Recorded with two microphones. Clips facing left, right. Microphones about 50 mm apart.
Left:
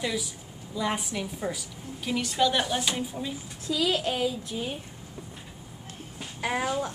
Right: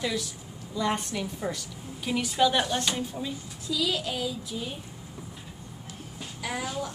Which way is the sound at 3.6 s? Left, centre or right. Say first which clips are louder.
Left 3 dB; left.